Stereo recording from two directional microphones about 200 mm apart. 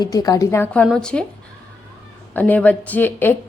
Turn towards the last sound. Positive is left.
turn(degrees=10)  # may be behind; listen again after turning